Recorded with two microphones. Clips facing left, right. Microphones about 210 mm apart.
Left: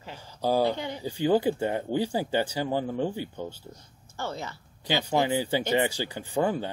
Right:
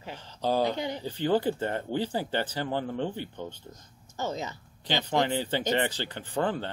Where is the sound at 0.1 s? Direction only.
10° left (ahead or behind).